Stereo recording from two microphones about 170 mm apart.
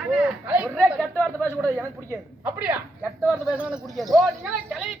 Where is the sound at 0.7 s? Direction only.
5° left (ahead or behind).